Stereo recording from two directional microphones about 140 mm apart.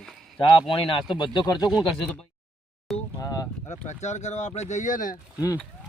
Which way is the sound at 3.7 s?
55° left (ahead or behind).